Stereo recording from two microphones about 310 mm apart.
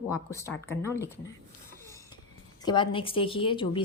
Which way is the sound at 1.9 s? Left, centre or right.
Centre.